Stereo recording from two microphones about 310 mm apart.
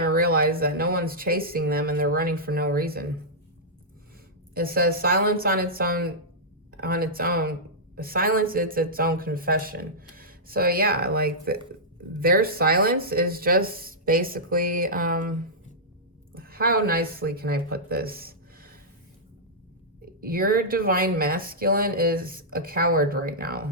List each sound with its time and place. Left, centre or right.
0.0 s speech: right
4.5 s speech: right
20.2 s speech: right